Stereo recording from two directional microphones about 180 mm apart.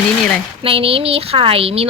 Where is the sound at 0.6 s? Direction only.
30° right (ahead or behind).